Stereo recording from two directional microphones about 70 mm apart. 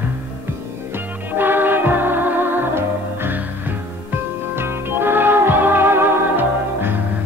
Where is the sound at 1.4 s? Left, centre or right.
Right.